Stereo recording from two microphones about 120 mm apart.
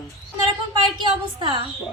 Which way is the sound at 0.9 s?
40° right (ahead or behind).